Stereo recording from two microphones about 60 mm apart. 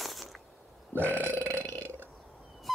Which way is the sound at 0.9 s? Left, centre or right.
Right.